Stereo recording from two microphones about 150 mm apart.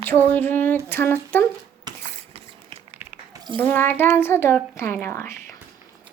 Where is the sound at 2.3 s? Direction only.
40° right (ahead or behind).